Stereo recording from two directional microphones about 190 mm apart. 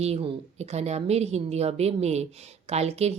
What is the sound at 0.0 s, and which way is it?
A woman's voice, 30° right (ahead or behind).